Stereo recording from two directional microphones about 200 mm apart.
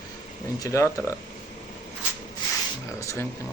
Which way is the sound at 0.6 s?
15° left (ahead or behind).